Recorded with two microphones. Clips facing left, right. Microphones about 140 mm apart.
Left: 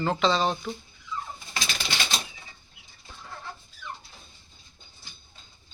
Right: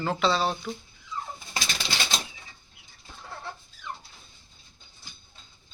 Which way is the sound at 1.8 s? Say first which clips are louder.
Even; 30° right (ahead or behind).